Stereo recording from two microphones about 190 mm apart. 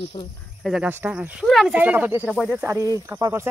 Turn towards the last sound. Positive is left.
turn(degrees=-15)  # may be behind; listen again after turning